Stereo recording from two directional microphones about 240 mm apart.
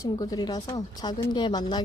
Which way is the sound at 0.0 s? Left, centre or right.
Centre.